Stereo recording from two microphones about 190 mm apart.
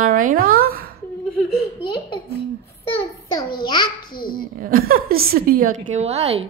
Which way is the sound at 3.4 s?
25° left (ahead or behind).